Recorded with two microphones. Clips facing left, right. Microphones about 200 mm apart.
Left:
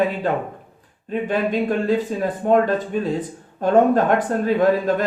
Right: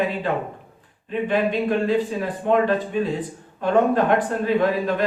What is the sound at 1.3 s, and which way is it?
Speech, 45° left (ahead or behind).